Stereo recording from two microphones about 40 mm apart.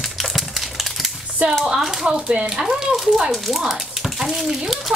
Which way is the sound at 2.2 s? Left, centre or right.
Right.